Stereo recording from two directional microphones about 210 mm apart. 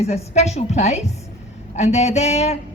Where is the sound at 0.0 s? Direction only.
30° left (ahead or behind).